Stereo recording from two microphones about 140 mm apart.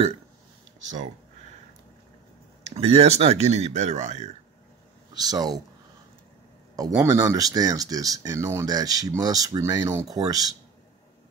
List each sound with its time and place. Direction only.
2.6 s speech: 50° right (ahead or behind)
5.1 s speech: 25° right (ahead or behind)
6.9 s speech: 20° right (ahead or behind)